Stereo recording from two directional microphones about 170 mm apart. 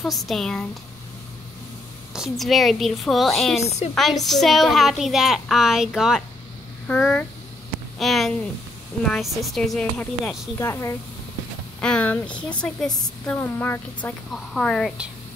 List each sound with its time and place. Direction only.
0.0 s speech: centre (ahead or behind)
2.1 s speech: centre (ahead or behind)
10.6 s speech: 15° left (ahead or behind)